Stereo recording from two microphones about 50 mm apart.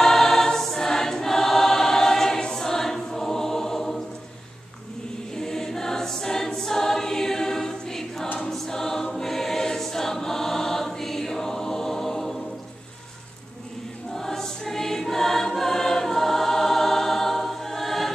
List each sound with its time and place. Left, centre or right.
0.0 s choir: centre
5.3 s choir: centre
14.1 s choir: centre